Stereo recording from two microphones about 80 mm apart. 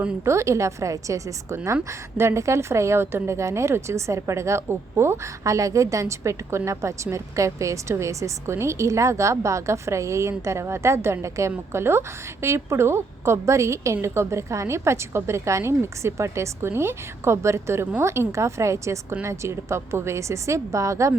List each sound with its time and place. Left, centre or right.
0.3 s a woman's voice: right